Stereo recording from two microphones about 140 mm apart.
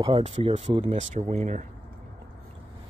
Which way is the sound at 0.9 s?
55° right (ahead or behind).